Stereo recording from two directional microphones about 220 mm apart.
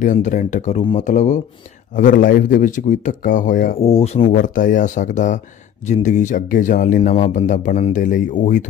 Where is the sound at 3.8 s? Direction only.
25° left (ahead or behind).